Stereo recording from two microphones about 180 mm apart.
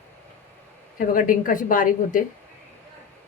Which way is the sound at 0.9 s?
50° left (ahead or behind).